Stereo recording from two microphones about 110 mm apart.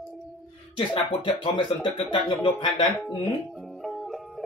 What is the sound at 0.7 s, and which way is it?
Speech, 50° left (ahead or behind).